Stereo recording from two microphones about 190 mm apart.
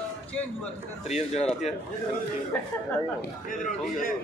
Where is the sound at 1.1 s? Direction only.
35° left (ahead or behind).